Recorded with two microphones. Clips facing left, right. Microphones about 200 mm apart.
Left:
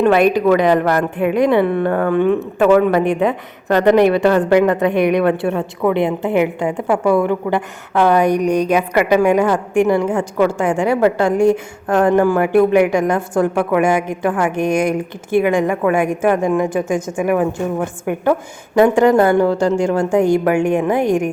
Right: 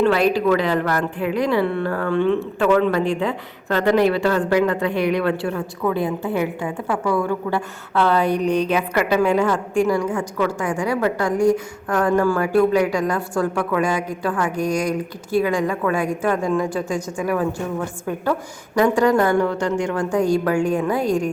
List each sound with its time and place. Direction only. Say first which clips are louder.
0.0 s a woman's voice: left 4 dB; 20° left (ahead or behind)